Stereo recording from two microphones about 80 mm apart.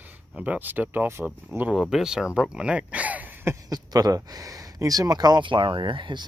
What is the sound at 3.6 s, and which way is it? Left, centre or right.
Speech, right.